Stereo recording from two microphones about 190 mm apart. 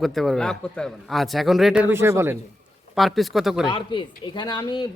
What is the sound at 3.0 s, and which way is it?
Speech, centre (ahead or behind).